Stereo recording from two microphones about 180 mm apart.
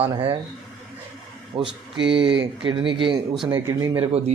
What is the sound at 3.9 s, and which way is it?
Speech, 35° right (ahead or behind).